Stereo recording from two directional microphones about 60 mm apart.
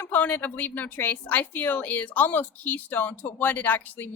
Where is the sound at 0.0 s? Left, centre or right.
Left.